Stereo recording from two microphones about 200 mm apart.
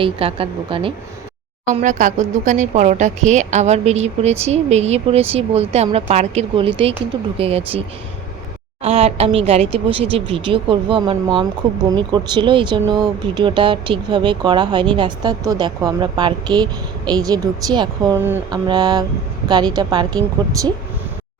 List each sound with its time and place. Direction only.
0.0 s speech: 30° right (ahead or behind)
1.6 s speech: 40° right (ahead or behind)
8.8 s speech: 30° right (ahead or behind)